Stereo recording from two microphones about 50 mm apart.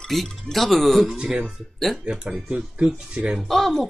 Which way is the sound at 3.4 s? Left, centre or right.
Centre.